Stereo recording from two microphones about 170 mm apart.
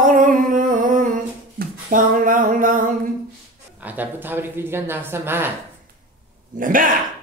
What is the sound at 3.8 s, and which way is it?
Speech, 10° right (ahead or behind).